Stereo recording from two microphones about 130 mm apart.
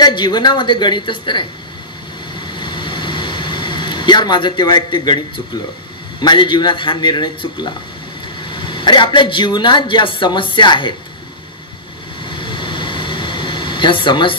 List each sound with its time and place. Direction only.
0.0 s speech: 35° left (ahead or behind)
2.6 s air conditioning: 35° left (ahead or behind)
6.2 s speech: 35° left (ahead or behind)
12.3 s air conditioning: 40° left (ahead or behind)